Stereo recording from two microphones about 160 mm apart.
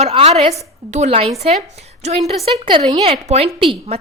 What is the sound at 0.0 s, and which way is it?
A woman's voice, 40° right (ahead or behind).